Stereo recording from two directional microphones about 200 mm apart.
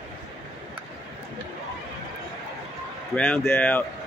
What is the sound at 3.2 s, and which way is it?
Speech, 10° left (ahead or behind).